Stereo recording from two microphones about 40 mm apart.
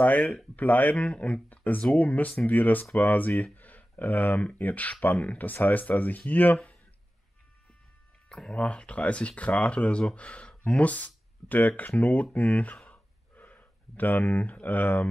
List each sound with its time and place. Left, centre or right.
0.0 s speech: left
0.9 s speech: left
1.5 s speech: left
3.5 s a sound: left
4.6 s speech: left
5.4 s speech: left
8.5 s speech: left
12.9 s a sound: left